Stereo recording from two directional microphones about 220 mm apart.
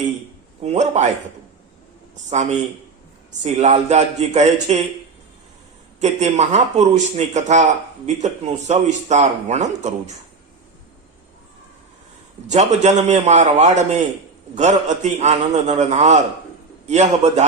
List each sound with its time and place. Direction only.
0.6 s speech: 30° right (ahead or behind)
2.3 s speech: 30° right (ahead or behind)
6.0 s speech: 30° right (ahead or behind)
12.5 s speech: 30° right (ahead or behind)